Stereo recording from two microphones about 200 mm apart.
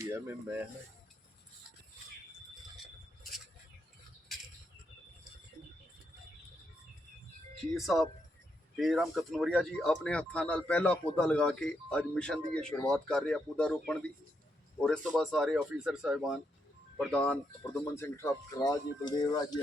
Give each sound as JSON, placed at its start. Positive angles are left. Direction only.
{"t": 7.7, "sound": "speech", "side_deg": 0}